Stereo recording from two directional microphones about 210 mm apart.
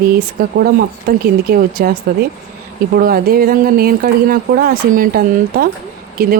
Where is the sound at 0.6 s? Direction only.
45° right (ahead or behind).